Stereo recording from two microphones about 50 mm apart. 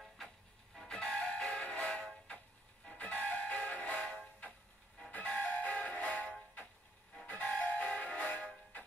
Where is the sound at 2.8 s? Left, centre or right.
Left.